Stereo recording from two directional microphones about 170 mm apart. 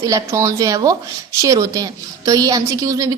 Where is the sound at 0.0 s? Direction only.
20° right (ahead or behind).